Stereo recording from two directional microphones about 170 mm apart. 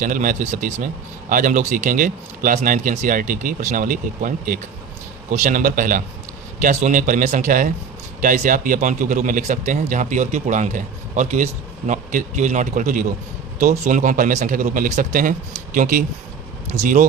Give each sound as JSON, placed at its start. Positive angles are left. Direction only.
{"t": 0.0, "sound": "speech", "side_deg": -50}